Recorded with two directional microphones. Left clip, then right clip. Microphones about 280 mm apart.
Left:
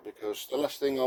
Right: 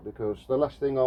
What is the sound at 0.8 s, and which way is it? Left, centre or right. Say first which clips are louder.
Speech: right 3 dB; left.